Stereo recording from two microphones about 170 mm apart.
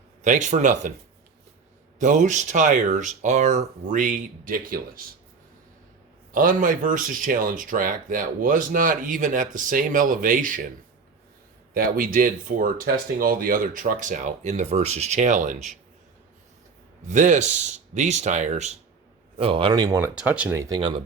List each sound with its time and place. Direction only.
0.2 s speech: 45° right (ahead or behind)
2.0 s speech: 45° right (ahead or behind)
6.3 s speech: 55° right (ahead or behind)
11.7 s speech: 55° right (ahead or behind)
17.1 s speech: 45° right (ahead or behind)
19.4 s speech: 35° right (ahead or behind)
20.0 s speech: 10° right (ahead or behind)
20.6 s speech: 25° right (ahead or behind)